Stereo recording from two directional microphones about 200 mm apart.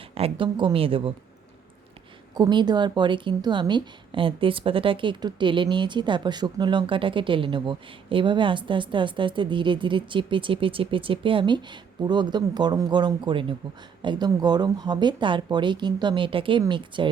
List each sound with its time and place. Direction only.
0.1 s a woman's voice: 25° right (ahead or behind)
2.3 s a woman's voice: 20° right (ahead or behind)